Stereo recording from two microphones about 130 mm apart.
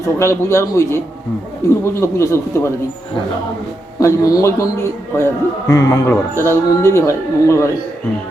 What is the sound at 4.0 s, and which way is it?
Speech, 25° left (ahead or behind).